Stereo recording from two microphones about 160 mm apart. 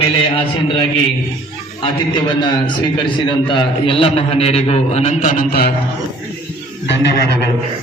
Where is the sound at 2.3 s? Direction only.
30° left (ahead or behind); by 5.7 s 65° left (ahead or behind).